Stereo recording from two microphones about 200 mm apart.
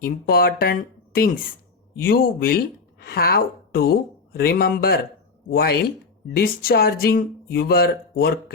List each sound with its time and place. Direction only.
0.0 s speech: 50° left (ahead or behind)